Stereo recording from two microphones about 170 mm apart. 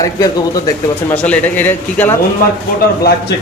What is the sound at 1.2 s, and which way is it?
Speech, 10° left (ahead or behind).